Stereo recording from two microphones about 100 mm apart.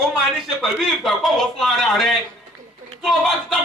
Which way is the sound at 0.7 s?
5° left (ahead or behind).